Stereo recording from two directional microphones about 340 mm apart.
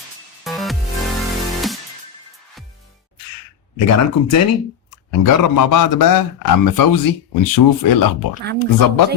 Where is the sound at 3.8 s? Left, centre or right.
Left.